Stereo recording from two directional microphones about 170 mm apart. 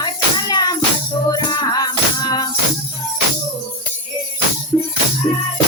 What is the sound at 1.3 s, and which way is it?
Music, 25° left (ahead or behind).